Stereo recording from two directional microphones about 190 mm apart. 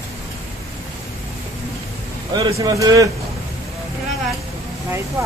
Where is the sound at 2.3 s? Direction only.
20° right (ahead or behind).